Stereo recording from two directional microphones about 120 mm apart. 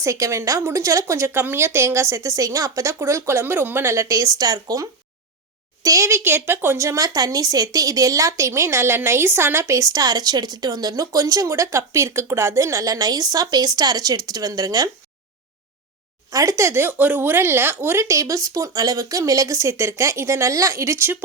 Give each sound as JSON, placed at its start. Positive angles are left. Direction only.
{"t": 0.0, "sound": "speech", "side_deg": -25}
{"t": 16.3, "sound": "speech", "side_deg": -25}